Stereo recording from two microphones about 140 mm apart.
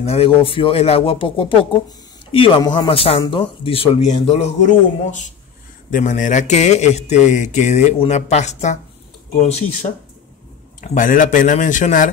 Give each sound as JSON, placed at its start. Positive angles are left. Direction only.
{"t": 0.0, "sound": "speech", "side_deg": 45}
{"t": 2.9, "sound": "speech", "side_deg": 40}
{"t": 5.9, "sound": "speech", "side_deg": 65}
{"t": 10.8, "sound": "speech", "side_deg": 70}